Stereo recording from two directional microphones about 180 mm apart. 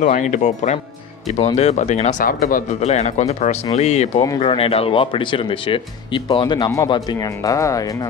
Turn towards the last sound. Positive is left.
turn(degrees=20)  # may be behind; listen again after turning